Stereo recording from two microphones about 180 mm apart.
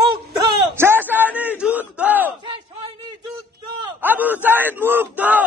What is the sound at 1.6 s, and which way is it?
Battle cry, 10° right (ahead or behind).